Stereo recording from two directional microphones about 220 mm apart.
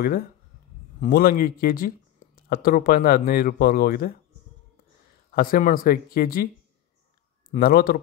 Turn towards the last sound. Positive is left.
turn(degrees=40)  # may be behind; listen again after turning